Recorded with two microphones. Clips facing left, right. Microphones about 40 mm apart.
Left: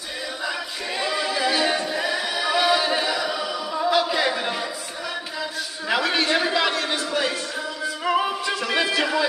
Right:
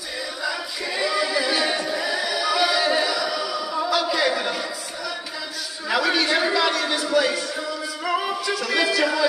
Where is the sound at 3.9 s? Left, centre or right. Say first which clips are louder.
Left 1 dB; left.